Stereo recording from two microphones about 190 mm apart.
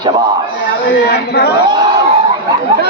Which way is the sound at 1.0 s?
60° left (ahead or behind).